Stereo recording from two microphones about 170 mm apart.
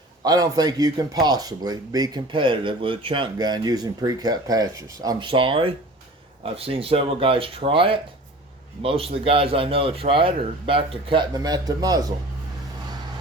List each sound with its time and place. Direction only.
0.3 s a man's voice: 20° right (ahead or behind)